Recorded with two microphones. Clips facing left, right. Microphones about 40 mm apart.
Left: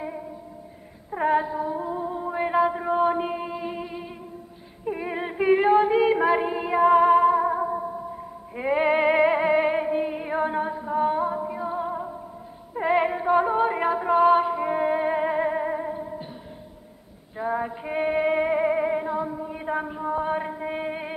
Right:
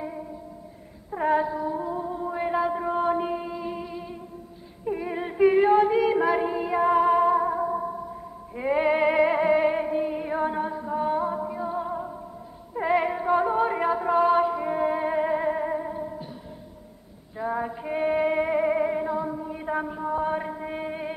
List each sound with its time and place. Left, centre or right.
1.1 s a sound: centre
4.8 s female singing: left
8.5 s music: centre
12.7 s female singing: centre
17.4 s music: centre